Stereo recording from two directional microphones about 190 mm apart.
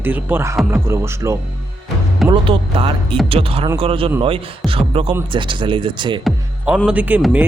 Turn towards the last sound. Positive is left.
turn(degrees=-10)  # may be behind; listen again after turning